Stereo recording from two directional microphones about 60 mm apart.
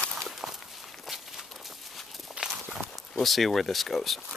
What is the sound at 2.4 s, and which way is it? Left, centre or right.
Walk, centre.